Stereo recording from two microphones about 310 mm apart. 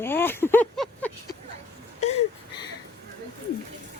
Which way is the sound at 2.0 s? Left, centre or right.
Left.